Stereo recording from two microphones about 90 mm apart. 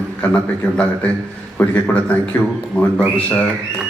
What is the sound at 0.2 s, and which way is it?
A man's voice, 15° left (ahead or behind).